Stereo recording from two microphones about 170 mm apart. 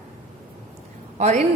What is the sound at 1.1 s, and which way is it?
Speech, 40° right (ahead or behind).